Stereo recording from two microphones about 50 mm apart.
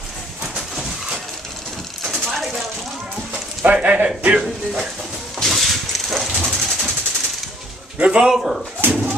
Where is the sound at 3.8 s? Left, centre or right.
Right.